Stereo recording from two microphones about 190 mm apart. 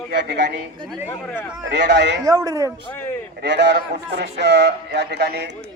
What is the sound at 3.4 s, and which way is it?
Speech, 65° right (ahead or behind).